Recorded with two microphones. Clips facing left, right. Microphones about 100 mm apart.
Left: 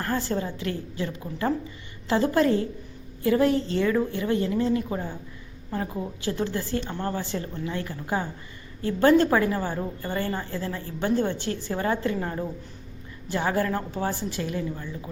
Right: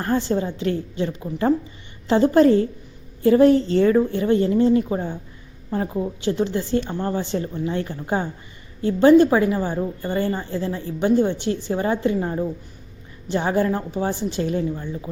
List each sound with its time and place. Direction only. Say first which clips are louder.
0.0 s a woman's voice: right 6 dB; 20° right (ahead or behind)